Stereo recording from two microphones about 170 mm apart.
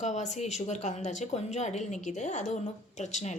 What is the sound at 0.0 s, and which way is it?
Speech, 40° left (ahead or behind).